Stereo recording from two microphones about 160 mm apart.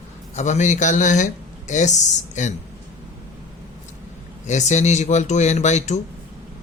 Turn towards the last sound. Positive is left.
turn(degrees=45)  # may be behind; listen again after turning